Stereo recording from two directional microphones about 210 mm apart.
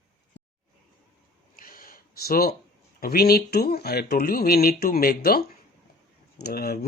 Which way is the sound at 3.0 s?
45° left (ahead or behind).